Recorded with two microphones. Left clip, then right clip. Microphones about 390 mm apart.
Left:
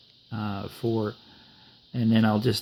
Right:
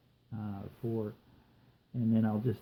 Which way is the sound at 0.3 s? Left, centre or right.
Left.